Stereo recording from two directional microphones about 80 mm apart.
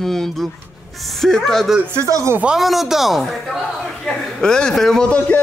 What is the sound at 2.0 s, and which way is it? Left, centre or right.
Speech, right.